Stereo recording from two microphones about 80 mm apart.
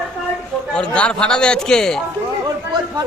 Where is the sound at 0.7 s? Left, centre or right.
Centre.